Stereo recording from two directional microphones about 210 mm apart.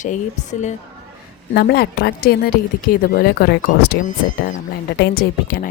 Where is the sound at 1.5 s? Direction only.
50° left (ahead or behind).